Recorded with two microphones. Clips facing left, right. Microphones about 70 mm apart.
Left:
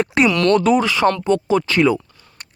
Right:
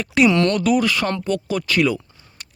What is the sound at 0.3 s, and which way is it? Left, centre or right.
Speech, right.